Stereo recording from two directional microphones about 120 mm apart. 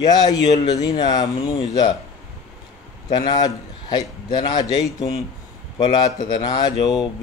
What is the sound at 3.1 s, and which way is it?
A man's voice, 35° left (ahead or behind).